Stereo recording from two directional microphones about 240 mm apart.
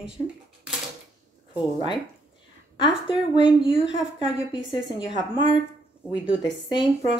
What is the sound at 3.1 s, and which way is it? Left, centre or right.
Speech, left.